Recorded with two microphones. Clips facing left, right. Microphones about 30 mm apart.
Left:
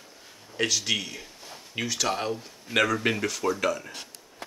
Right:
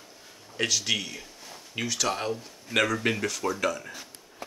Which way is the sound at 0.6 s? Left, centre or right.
Centre.